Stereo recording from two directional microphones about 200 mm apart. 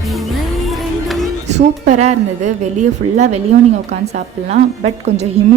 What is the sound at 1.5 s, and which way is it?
A woman's voice, 35° right (ahead or behind).